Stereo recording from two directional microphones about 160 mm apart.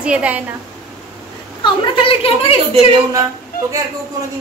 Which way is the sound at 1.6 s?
35° left (ahead or behind).